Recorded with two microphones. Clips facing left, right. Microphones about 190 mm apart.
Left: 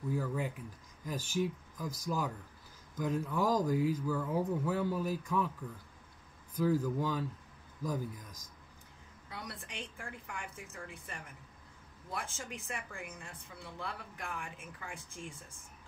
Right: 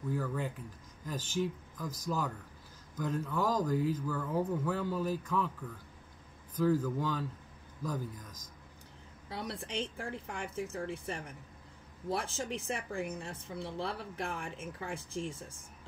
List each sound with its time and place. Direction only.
0.1 s speech: 10° left (ahead or behind)
6.6 s speech: 10° left (ahead or behind)
9.3 s a woman's voice: 30° right (ahead or behind)